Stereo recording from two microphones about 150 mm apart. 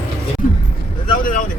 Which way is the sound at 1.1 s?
65° left (ahead or behind).